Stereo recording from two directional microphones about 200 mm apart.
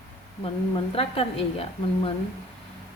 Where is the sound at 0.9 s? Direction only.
30° left (ahead or behind).